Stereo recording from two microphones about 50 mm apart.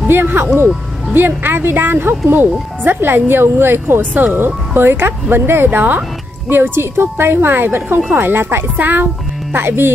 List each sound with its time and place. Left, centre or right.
0.1 s speech: right
6.5 s speech: right
8.7 s speech: right
9.5 s speech: right